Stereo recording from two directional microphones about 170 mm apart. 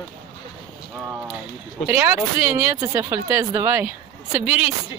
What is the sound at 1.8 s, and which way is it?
Speech, 15° right (ahead or behind).